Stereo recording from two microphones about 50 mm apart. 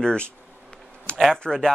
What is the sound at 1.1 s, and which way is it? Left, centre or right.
Speech, centre.